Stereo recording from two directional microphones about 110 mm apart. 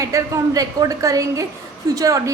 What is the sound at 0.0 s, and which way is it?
A woman's voice, 30° right (ahead or behind).